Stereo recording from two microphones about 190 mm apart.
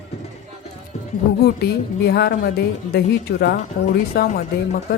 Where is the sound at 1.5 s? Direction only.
55° left (ahead or behind).